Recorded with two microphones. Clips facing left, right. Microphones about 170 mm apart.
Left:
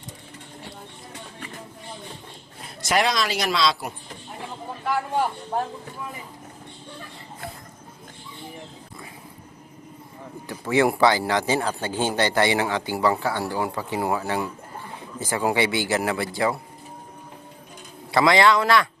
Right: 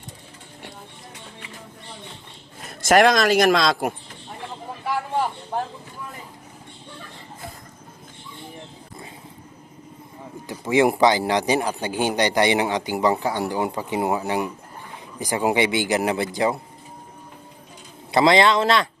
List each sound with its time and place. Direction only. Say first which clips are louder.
2.6 s a man's voice: right 7 dB; 45° right (ahead or behind)
10.4 s a man's voice: right 2 dB; 15° right (ahead or behind)
18.1 s speech: right 1 dB; 20° right (ahead or behind)